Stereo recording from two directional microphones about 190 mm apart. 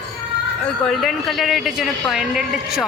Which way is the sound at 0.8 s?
Centre (ahead or behind).